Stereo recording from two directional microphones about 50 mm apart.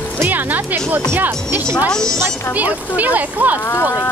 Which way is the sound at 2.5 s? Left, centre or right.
Right.